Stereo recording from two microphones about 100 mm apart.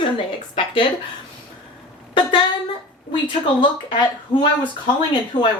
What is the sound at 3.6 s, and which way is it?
Speech, 55° left (ahead or behind).